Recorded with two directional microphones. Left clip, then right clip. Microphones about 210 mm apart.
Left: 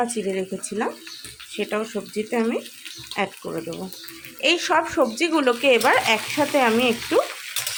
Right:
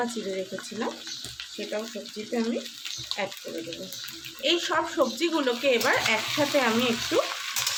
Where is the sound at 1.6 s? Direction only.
45° left (ahead or behind).